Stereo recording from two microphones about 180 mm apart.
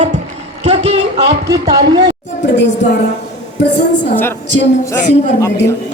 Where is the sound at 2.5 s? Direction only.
75° left (ahead or behind).